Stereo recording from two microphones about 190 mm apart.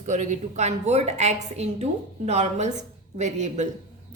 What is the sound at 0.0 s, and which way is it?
A woman's voice, 40° right (ahead or behind).